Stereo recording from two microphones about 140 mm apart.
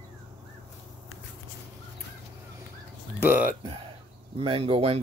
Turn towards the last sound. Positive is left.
turn(degrees=-45)  # may be behind; listen again after turning